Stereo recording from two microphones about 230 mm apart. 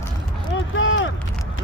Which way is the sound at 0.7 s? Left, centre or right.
Left.